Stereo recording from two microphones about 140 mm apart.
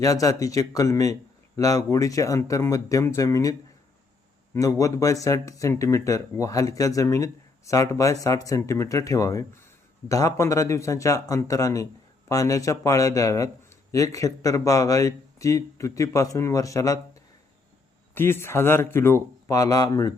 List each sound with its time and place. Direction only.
0.0 s speech: 25° left (ahead or behind)
4.5 s speech: 25° left (ahead or behind)